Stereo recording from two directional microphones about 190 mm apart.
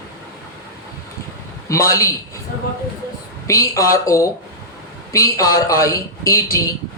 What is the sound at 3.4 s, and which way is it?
A woman's voice, 15° left (ahead or behind).